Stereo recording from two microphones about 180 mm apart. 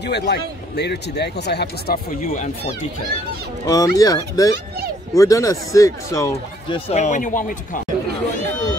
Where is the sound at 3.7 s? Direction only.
20° left (ahead or behind).